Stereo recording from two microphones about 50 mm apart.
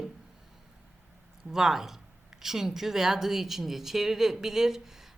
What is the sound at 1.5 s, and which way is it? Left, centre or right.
Speech, centre.